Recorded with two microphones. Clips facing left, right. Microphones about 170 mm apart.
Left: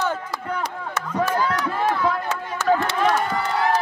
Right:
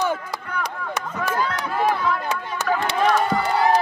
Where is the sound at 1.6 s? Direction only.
15° right (ahead or behind).